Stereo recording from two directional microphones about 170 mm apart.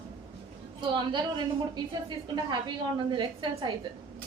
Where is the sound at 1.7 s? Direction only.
25° right (ahead or behind).